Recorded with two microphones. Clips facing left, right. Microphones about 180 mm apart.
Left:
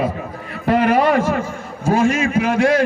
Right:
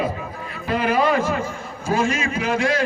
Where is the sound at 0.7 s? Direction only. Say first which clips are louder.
Left 5 dB; 70° left (ahead or behind).